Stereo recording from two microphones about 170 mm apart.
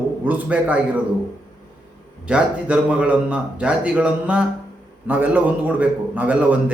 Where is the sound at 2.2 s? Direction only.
5° right (ahead or behind).